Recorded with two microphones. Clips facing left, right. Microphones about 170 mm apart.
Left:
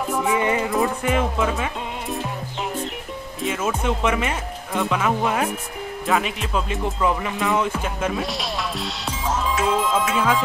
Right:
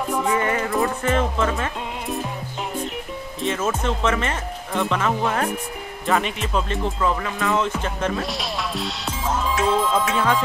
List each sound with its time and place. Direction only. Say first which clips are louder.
0.1 s music: left 1 dB; 10° left (ahead or behind)
3.4 s speech: even; 10° left (ahead or behind)
6.8 s music: left 1 dB; 15° left (ahead or behind)
9.7 s speech: right 1 dB; centre (ahead or behind)